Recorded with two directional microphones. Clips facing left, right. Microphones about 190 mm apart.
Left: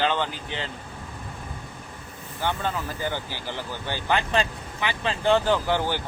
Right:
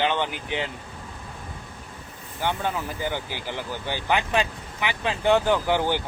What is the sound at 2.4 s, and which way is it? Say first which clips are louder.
Speech: right 1 dB; 15° right (ahead or behind).